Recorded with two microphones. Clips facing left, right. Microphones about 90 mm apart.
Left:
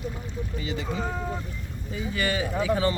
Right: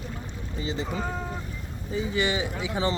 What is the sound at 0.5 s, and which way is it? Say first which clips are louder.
Speech: right 3 dB; 30° right (ahead or behind).